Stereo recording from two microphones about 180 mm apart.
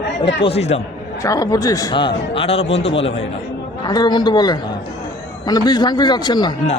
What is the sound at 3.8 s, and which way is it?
Speech, 20° left (ahead or behind).